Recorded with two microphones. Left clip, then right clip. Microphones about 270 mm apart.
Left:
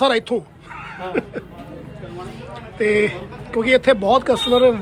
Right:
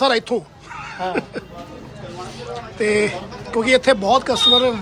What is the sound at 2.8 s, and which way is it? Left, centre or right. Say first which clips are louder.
Speech: left 1 dB; centre.